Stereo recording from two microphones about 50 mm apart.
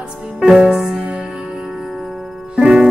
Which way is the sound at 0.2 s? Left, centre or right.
Centre.